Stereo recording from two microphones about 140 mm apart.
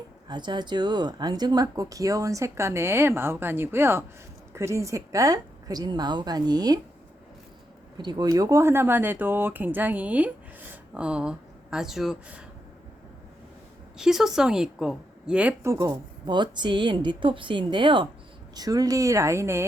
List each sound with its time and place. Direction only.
0.3 s speech: 30° right (ahead or behind)
7.9 s speech: 30° right (ahead or behind); by 12.4 s 5° right (ahead or behind)
14.0 s a woman's voice: 5° right (ahead or behind)
15.8 s a woman's voice: 30° right (ahead or behind)